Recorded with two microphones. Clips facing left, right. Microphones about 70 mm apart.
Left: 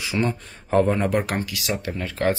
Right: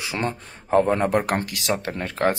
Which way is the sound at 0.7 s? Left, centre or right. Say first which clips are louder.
Right 1 dB; right.